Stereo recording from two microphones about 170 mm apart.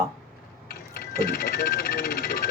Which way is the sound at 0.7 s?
65° left (ahead or behind).